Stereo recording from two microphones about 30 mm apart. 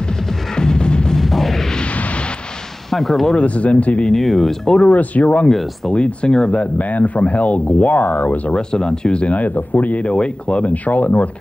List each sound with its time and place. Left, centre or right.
0.6 s music: left
1.1 s music: centre
2.9 s speech: centre
3.3 s speech: left
4.1 s speech: centre
4.8 s speech: left
5.9 s speech: left
6.6 s speech: left
8.5 s speech: left
9.3 s speech: left
10.0 s speech: left
10.7 s speech: left